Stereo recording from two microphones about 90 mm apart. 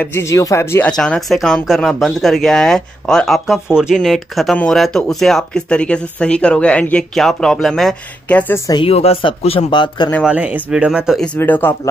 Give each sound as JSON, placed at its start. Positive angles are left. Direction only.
{"t": 0.0, "sound": "speech", "side_deg": 30}
{"t": 0.8, "sound": "speech", "side_deg": 10}
{"t": 3.9, "sound": "speech", "side_deg": 0}
{"t": 7.2, "sound": "speech", "side_deg": 5}
{"t": 8.3, "sound": "speech", "side_deg": 15}
{"t": 8.8, "sound": "a man's voice", "side_deg": 90}
{"t": 10.2, "sound": "speech", "side_deg": -15}
{"t": 11.3, "sound": "speech", "side_deg": 20}